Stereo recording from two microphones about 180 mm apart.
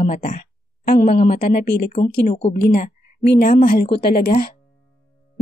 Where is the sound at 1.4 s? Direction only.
50° left (ahead or behind); by 2.6 s 35° left (ahead or behind).